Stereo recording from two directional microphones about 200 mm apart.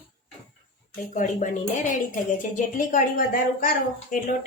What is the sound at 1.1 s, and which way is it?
Speech, 40° left (ahead or behind).